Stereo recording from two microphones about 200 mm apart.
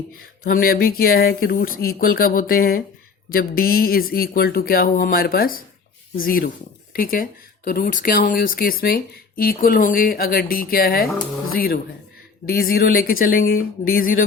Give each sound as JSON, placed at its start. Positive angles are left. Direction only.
{"t": 0.4, "sound": "speech", "side_deg": 45}